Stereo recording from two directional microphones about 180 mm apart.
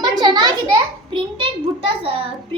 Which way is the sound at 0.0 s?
20° right (ahead or behind).